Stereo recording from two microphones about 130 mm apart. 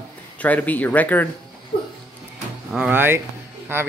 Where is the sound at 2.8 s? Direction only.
15° right (ahead or behind).